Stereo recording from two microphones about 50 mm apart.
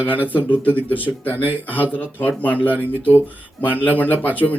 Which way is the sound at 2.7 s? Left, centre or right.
Right.